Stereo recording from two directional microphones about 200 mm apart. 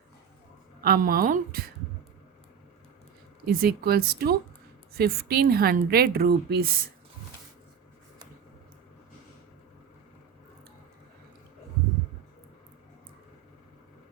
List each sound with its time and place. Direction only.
0.8 s a woman's voice: 45° right (ahead or behind)
3.4 s a woman's voice: 50° right (ahead or behind)